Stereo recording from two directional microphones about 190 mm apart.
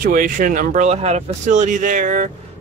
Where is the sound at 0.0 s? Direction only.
45° right (ahead or behind).